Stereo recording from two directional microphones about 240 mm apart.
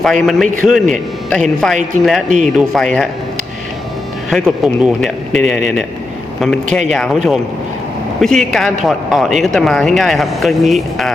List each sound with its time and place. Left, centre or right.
0.0 s a man's voice: centre
4.3 s a man's voice: centre